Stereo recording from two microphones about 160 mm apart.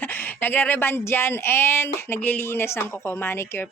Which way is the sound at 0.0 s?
10° left (ahead or behind).